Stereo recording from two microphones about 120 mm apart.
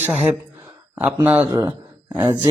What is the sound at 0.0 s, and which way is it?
Speech, 10° right (ahead or behind).